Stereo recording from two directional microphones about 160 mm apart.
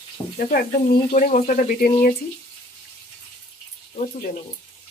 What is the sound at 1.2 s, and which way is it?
Speech, 55° left (ahead or behind).